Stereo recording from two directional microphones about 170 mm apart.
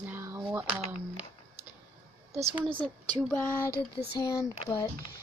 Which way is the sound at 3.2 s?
10° left (ahead or behind).